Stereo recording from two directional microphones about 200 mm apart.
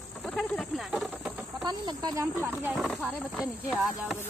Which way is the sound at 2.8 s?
Centre (ahead or behind).